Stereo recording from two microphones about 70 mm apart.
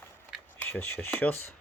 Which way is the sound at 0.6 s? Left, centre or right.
Left.